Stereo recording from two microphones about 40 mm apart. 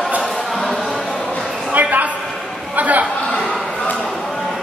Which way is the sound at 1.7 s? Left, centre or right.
Right.